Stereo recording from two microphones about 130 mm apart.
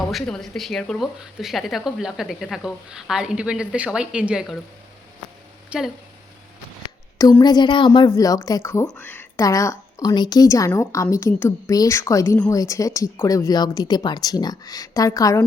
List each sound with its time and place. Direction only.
0.1 s speech: centre (ahead or behind)
5.7 s speech: 10° right (ahead or behind)
7.4 s a woman's voice: 35° left (ahead or behind)